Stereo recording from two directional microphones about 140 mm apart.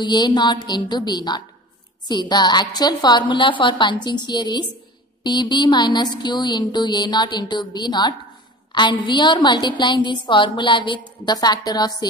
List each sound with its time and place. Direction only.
0.0 s a woman's voice: 30° left (ahead or behind)